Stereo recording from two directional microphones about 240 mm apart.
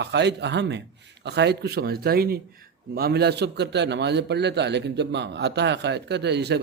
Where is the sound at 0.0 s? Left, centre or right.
Right.